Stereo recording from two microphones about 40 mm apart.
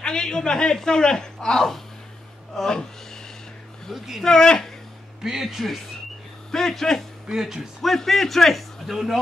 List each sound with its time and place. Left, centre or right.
0.0 s speech: centre
3.9 s a man's voice: centre
4.2 s speech: centre
5.2 s speech: centre
6.5 s speech: centre
7.2 s speech: centre
7.8 s a man's voice: centre
8.9 s speech: centre